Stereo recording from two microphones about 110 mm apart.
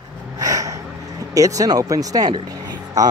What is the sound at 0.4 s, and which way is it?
Snort, 30° right (ahead or behind).